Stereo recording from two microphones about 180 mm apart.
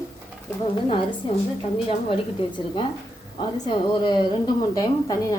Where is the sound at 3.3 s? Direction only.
25° left (ahead or behind).